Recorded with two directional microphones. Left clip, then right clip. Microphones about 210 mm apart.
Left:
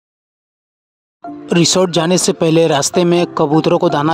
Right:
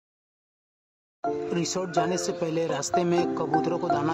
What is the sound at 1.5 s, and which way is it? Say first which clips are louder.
Speech: left 18 dB; 45° left (ahead or behind).